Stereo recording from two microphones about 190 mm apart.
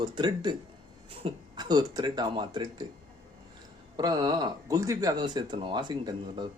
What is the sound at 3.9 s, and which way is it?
Speech, 20° right (ahead or behind).